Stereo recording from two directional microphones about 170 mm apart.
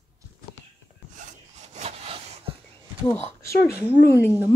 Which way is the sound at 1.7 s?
35° right (ahead or behind).